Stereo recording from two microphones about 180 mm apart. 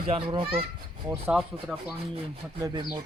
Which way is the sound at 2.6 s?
20° right (ahead or behind).